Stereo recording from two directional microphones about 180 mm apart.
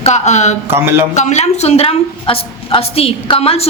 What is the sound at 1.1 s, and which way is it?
A woman's voice, 40° left (ahead or behind).